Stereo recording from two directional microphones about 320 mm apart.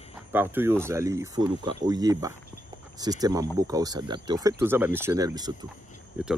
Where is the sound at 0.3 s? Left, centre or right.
Centre.